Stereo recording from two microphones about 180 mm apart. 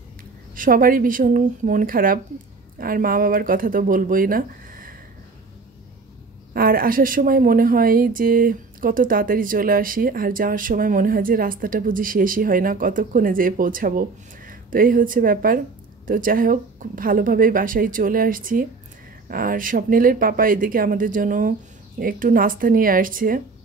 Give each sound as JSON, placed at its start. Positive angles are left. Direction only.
{"t": 0.6, "sound": "a woman's voice", "side_deg": -50}
{"t": 6.5, "sound": "a woman's voice", "side_deg": -55}